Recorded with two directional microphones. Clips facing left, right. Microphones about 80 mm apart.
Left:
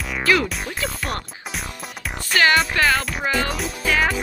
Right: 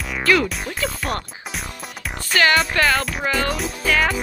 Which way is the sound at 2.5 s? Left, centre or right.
Centre.